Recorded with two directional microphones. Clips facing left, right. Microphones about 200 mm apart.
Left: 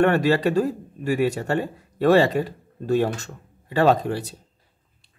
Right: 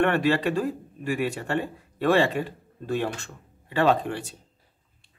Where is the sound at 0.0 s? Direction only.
40° left (ahead or behind).